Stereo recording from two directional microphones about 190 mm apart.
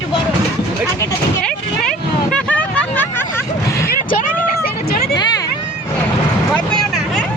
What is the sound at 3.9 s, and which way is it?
Speech, 45° left (ahead or behind).